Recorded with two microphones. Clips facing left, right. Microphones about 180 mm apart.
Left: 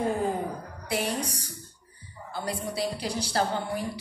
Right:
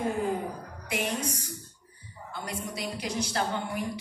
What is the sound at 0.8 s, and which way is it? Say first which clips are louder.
Speech: left 2 dB; 35° left (ahead or behind).